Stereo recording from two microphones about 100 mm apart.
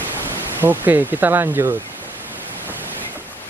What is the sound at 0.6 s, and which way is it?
Speech, 20° right (ahead or behind).